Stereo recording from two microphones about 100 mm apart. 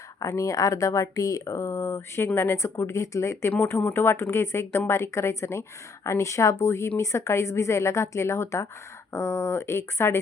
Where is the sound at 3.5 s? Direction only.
20° left (ahead or behind).